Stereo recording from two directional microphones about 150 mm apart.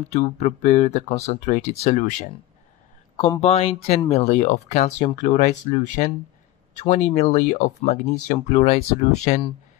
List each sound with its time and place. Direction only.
0.1 s speech: 50° left (ahead or behind)
3.3 s speech: 45° left (ahead or behind)